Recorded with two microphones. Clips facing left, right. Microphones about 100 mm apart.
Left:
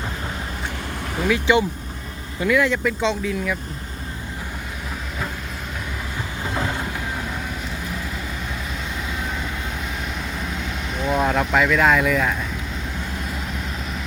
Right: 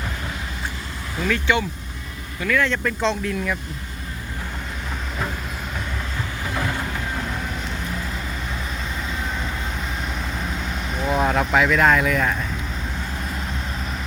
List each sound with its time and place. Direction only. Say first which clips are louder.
1.2 s speech: left 3 dB; 15° left (ahead or behind)
6.4 s vehicle: left 1 dB; 20° left (ahead or behind)
11.0 s speech: even; centre (ahead or behind)